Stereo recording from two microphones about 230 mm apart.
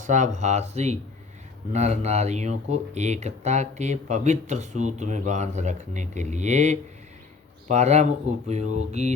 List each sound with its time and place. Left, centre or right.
0.0 s speech: right